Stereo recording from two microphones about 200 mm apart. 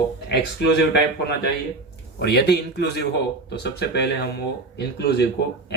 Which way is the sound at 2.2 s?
55° left (ahead or behind).